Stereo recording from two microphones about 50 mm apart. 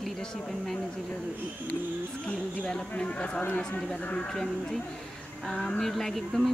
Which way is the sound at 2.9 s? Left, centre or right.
Left.